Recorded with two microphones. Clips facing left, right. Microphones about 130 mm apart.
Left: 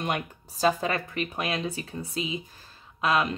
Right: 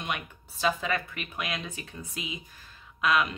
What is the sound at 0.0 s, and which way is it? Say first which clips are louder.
Speech: left 5 dB; 40° left (ahead or behind).